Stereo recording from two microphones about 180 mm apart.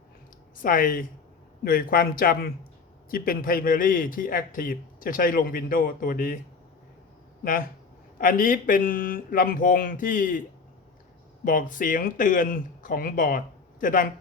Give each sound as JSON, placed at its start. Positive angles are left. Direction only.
{"t": 0.5, "sound": "speech", "side_deg": 50}
{"t": 8.2, "sound": "speech", "side_deg": 50}
{"t": 11.4, "sound": "speech", "side_deg": 50}